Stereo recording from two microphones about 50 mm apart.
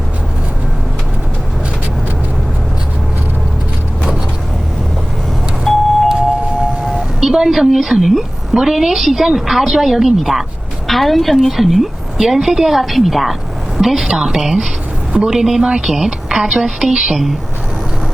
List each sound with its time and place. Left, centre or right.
5.7 s doorbell: centre
6.8 s a woman's voice: centre